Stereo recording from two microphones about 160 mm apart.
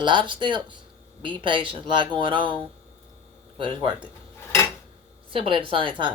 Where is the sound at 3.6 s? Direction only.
30° right (ahead or behind).